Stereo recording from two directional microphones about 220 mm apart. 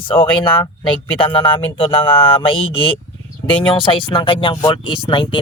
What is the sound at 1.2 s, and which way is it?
Speech, 25° left (ahead or behind).